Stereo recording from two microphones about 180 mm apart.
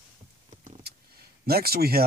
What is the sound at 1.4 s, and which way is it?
Speech, 60° right (ahead or behind).